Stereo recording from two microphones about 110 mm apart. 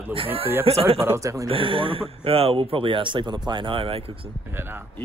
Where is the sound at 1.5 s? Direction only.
55° right (ahead or behind).